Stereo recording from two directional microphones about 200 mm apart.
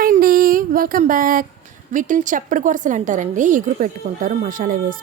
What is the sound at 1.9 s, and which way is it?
A woman's voice, 40° right (ahead or behind).